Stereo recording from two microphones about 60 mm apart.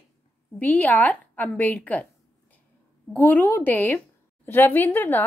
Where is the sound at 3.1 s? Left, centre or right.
Left.